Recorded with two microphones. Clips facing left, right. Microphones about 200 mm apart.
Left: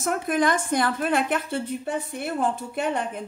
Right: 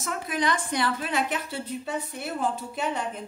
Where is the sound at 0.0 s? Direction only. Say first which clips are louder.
Left 6 dB; 50° left (ahead or behind).